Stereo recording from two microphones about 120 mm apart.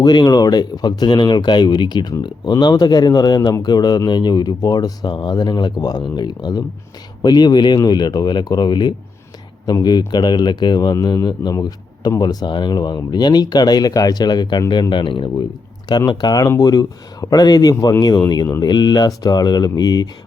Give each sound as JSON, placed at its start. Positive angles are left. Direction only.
{"t": 0.0, "sound": "speech", "side_deg": 35}